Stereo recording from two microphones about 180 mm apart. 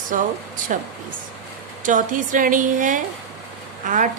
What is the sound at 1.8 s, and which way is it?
A woman's voice, 45° right (ahead or behind).